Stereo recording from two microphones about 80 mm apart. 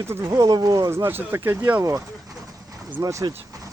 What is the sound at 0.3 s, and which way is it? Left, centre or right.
Speech, right.